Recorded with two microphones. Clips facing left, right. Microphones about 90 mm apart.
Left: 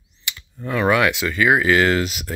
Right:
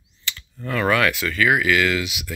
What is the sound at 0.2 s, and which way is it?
Speech, 15° left (ahead or behind).